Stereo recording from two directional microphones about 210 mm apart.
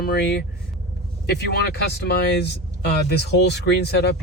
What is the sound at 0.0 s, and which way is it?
Speech, 50° left (ahead or behind).